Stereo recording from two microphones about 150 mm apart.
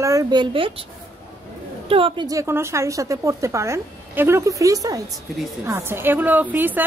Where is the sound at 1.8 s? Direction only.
35° right (ahead or behind).